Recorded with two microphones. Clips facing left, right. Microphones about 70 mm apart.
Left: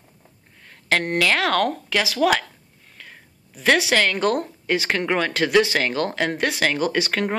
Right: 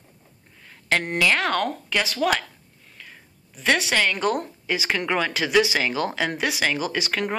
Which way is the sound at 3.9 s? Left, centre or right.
Left.